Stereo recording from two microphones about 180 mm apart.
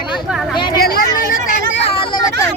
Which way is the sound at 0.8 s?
55° left (ahead or behind).